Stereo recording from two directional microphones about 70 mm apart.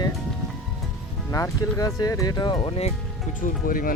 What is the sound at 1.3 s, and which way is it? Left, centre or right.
Speech, left.